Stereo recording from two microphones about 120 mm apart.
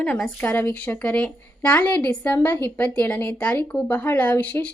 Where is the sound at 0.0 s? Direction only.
10° left (ahead or behind).